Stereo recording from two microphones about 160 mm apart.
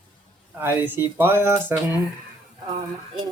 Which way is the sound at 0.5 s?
10° right (ahead or behind).